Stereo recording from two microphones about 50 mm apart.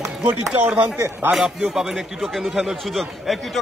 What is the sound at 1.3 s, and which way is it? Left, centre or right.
A man's voice, centre.